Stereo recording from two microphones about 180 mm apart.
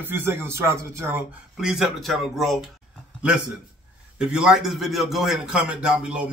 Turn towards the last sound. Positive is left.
turn(degrees=-5)  # may be behind; listen again after turning